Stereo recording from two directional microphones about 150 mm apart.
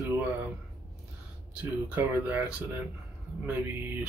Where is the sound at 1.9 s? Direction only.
10° right (ahead or behind).